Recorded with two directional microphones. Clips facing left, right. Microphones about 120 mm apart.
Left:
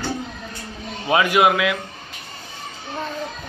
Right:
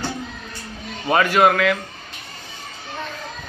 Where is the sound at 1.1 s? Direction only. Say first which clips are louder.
Right 1 dB; 5° left (ahead or behind).